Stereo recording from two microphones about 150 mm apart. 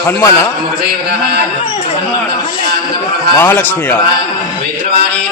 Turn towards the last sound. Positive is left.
turn(degrees=10)  # may be behind; listen again after turning